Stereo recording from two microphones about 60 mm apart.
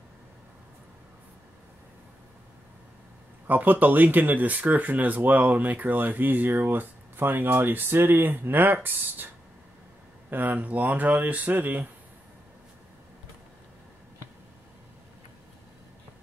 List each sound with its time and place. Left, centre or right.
3.4 s speech: right
10.3 s speech: right